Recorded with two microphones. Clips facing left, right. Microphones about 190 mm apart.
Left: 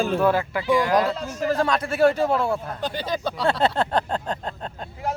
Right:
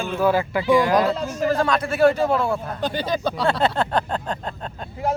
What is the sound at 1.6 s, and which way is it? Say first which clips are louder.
Speech: right 1 dB; 35° left (ahead or behind).